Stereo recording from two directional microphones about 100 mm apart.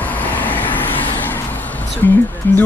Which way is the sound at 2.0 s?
25° left (ahead or behind).